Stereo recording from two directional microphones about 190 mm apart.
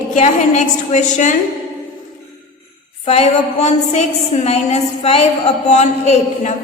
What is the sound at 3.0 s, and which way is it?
A woman's voice, 35° left (ahead or behind).